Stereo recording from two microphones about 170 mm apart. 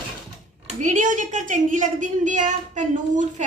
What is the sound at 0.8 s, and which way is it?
A woman's voice, 50° right (ahead or behind).